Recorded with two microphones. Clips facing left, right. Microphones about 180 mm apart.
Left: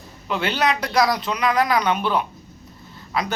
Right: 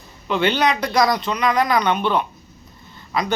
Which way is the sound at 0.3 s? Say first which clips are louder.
Right 3 dB; 5° left (ahead or behind).